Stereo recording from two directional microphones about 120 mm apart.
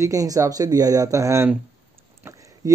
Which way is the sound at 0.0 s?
30° right (ahead or behind).